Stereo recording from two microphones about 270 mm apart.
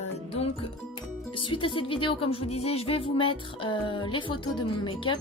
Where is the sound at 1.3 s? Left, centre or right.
Centre.